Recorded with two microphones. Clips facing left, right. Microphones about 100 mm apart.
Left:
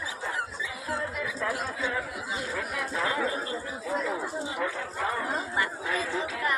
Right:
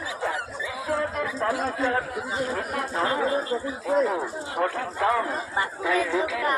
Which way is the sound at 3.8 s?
60° right (ahead or behind).